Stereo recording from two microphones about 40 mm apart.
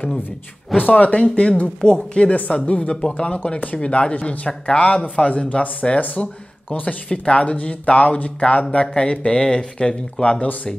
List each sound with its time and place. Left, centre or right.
0.8 s speech: left
1.8 s speech: centre
2.3 s speech: left
2.9 s speech: left
3.2 s speech: left
4.5 s speech: left